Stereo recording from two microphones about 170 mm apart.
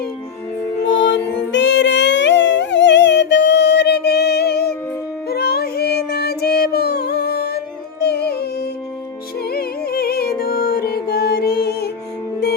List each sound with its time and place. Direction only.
0.9 s music: 90° left; by 4.7 s 70° left (ahead or behind)
5.3 s a sound: 65° left (ahead or behind)
8.0 s music: 70° left (ahead or behind)